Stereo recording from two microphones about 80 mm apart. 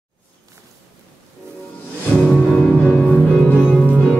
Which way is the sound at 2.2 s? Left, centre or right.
Centre.